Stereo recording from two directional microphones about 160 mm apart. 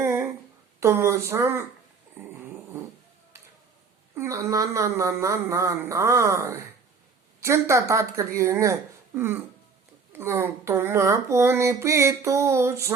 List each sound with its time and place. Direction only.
0.0 s a sound: 15° right (ahead or behind)
0.8 s speech: 15° right (ahead or behind)
4.1 s speech: 20° right (ahead or behind)